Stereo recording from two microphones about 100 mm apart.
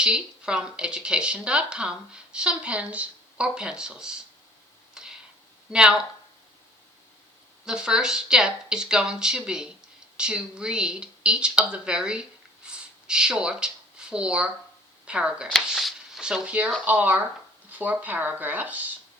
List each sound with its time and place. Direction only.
0.0 s speech: 10° right (ahead or behind)
5.0 s a sound: 5° right (ahead or behind)
5.7 s speech: 10° right (ahead or behind)
7.6 s speech: 10° right (ahead or behind)
12.6 s a sound: 10° right (ahead or behind)
14.1 s speech: 10° right (ahead or behind)